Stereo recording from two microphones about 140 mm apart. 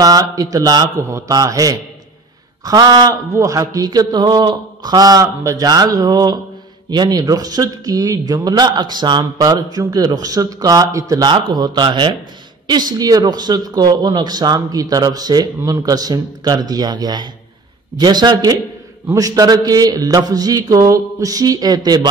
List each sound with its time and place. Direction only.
0.0 s speech: 25° right (ahead or behind)